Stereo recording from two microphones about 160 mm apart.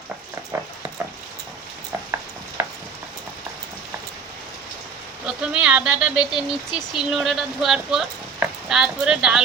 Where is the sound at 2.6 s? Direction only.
15° right (ahead or behind).